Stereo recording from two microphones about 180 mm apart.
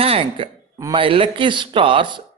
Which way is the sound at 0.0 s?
30° right (ahead or behind).